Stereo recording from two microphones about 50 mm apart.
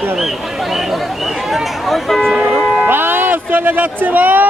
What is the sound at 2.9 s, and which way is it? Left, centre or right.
Speech, right.